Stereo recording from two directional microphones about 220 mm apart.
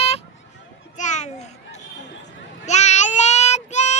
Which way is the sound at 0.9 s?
35° left (ahead or behind).